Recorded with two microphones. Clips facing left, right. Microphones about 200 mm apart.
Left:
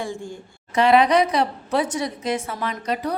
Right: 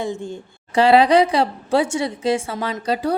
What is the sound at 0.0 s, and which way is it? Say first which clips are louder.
A woman's voice: right 4 dB; 20° right (ahead or behind).